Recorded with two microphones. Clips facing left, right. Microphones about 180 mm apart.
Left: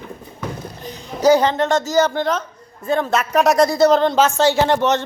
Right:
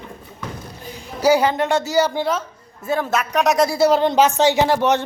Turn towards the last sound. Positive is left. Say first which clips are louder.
# even
turn(degrees=-10)  # may be behind; listen again after turning